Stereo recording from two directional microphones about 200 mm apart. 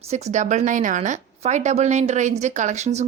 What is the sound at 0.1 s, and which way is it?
A woman's voice, 35° right (ahead or behind).